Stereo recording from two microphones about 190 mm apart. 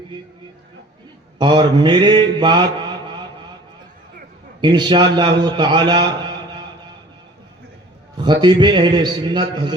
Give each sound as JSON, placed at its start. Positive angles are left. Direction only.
{"t": 1.4, "sound": "mantra", "side_deg": -25}
{"t": 4.6, "sound": "a man's voice", "side_deg": -25}
{"t": 8.2, "sound": "a man's voice", "side_deg": -25}